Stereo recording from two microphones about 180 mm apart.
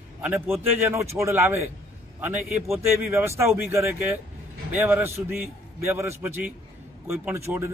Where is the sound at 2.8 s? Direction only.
15° right (ahead or behind).